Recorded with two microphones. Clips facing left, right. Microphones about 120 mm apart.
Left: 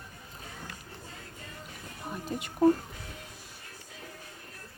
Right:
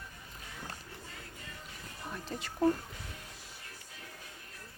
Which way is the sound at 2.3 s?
15° left (ahead or behind).